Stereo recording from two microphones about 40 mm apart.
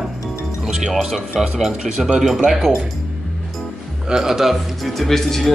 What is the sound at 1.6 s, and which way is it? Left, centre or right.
Speech, centre.